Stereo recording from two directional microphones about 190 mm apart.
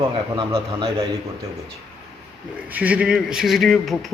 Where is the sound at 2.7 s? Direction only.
5° right (ahead or behind).